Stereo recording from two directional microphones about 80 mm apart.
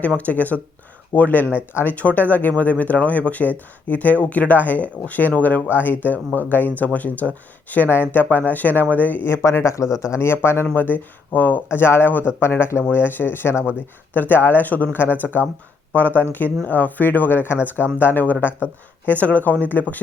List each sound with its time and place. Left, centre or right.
0.0 s speech: centre; by 9.8 s left
9.8 s speech: centre
10.1 s speech: left
16.0 s speech: right
16.6 s speech: left